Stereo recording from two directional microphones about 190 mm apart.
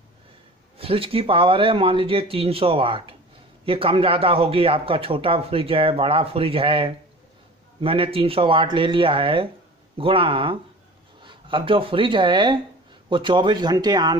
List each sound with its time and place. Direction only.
0.7 s speech: 30° right (ahead or behind)